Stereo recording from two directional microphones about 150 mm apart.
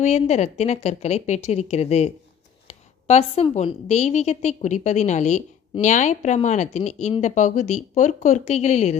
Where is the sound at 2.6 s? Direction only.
45° left (ahead or behind).